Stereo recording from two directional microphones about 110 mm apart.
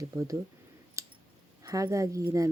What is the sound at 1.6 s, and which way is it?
Speech, 30° right (ahead or behind).